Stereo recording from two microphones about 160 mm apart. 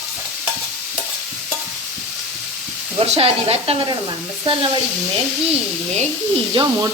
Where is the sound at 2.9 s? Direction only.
40° right (ahead or behind).